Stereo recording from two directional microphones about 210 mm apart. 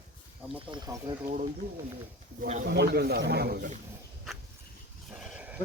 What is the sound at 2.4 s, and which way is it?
A man's voice, 50° right (ahead or behind).